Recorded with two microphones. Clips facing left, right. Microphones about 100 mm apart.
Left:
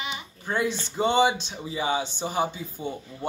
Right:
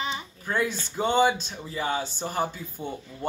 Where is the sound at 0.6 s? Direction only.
45° right (ahead or behind).